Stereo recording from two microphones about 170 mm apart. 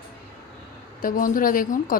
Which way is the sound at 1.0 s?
50° left (ahead or behind).